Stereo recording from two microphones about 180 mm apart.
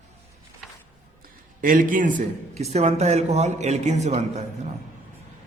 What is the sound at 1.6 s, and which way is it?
A man's voice, 50° right (ahead or behind).